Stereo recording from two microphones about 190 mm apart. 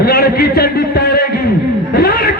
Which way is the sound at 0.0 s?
55° left (ahead or behind).